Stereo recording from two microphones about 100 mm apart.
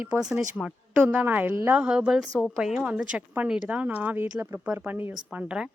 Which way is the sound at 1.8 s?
10° right (ahead or behind).